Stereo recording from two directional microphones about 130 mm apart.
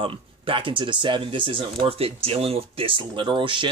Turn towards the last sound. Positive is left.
turn(degrees=-40)  # may be behind; listen again after turning